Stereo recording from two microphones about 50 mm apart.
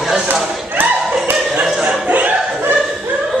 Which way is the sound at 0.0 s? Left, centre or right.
Centre.